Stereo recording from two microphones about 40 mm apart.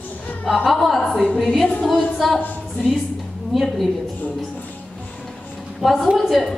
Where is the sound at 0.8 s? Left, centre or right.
Centre.